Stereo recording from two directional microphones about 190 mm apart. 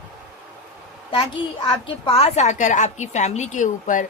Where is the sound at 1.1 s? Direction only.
25° left (ahead or behind).